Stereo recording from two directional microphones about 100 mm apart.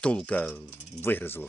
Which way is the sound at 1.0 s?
20° left (ahead or behind).